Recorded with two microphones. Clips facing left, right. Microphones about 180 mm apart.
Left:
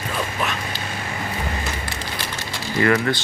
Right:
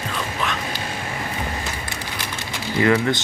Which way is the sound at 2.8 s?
15° right (ahead or behind).